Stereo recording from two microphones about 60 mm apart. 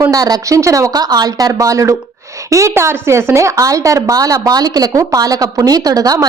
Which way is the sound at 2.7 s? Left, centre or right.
Right.